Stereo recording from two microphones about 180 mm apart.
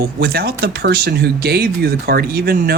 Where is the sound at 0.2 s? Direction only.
60° right (ahead or behind).